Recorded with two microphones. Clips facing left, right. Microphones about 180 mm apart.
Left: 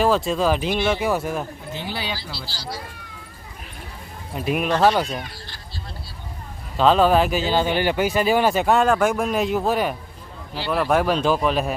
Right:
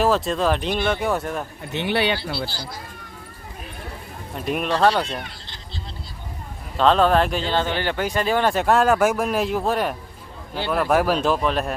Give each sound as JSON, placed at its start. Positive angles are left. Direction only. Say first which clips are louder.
{"t": 0.0, "sound": "speech", "louder": "left 1 dB", "side_deg": 0}
{"t": 1.7, "sound": "speech", "louder": "right 9 dB", "side_deg": -70}
{"t": 4.4, "sound": "speech", "louder": "left 1 dB", "side_deg": 5}
{"t": 6.7, "sound": "speech", "louder": "left 1 dB", "side_deg": 5}